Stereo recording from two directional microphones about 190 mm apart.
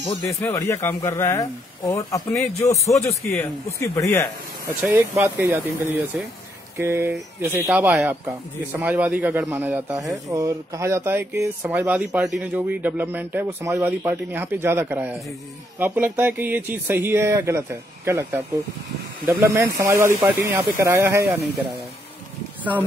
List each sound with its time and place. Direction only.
0.3 s speech: 15° left (ahead or behind)
4.6 s speech: 10° right (ahead or behind)